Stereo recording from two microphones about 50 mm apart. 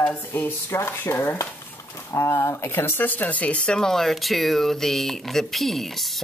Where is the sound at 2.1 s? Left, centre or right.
Left.